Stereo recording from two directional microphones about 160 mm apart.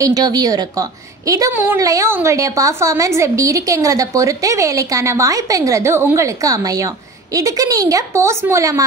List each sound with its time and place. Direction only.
0.0 s a woman's voice: 25° right (ahead or behind)